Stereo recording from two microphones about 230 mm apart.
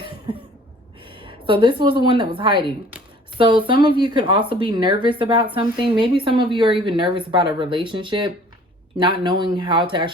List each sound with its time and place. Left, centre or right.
0.3 s cough: right
1.1 s a woman's voice: right